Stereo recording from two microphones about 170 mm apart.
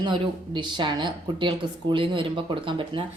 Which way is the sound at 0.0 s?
25° right (ahead or behind).